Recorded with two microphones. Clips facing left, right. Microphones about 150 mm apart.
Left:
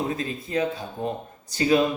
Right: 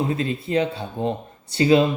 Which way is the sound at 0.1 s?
30° right (ahead or behind).